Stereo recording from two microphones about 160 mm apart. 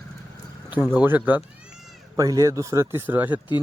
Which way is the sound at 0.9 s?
10° right (ahead or behind).